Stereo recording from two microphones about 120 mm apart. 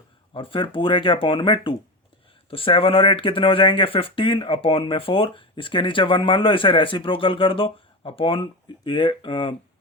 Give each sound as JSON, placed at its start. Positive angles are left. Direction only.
{"t": 0.3, "sound": "speech", "side_deg": 45}